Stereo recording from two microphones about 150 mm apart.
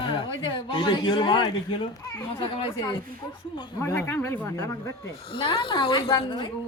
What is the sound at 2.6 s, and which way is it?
Speech, 35° left (ahead or behind).